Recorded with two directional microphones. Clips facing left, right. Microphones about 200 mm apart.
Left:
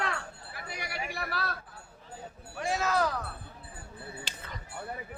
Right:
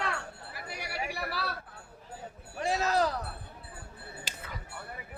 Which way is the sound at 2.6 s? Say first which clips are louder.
Right 1 dB; 35° right (ahead or behind).